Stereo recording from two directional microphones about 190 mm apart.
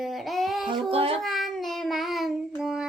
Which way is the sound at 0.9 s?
30° right (ahead or behind).